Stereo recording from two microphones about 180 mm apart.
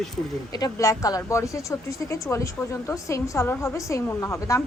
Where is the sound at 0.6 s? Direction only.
20° left (ahead or behind).